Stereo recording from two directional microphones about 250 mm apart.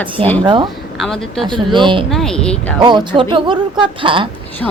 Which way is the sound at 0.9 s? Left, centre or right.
Centre.